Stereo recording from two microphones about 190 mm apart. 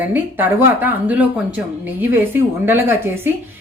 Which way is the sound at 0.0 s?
10° right (ahead or behind).